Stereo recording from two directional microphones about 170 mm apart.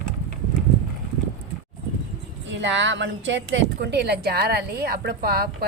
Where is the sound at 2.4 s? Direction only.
90° right.